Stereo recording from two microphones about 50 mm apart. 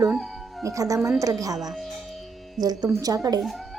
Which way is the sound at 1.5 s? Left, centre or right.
Centre.